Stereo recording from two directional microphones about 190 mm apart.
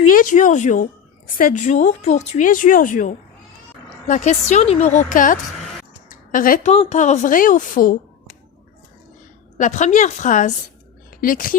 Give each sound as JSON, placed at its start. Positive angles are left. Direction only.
{"t": 0.1, "sound": "a woman's voice", "side_deg": 45}
{"t": 9.6, "sound": "a woman's voice", "side_deg": 40}